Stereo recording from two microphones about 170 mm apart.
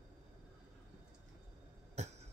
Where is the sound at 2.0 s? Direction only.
40° right (ahead or behind).